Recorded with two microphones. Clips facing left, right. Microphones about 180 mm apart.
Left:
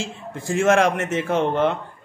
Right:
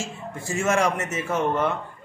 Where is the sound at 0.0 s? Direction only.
90° left.